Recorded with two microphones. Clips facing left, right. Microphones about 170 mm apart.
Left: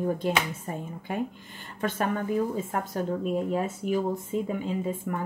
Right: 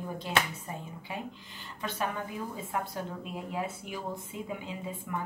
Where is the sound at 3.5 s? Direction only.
45° left (ahead or behind).